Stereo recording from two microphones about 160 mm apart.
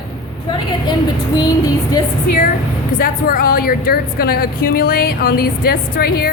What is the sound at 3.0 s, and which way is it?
Speech, 65° left (ahead or behind).